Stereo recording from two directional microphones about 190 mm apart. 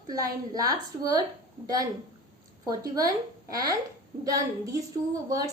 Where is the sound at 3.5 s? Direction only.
20° right (ahead or behind).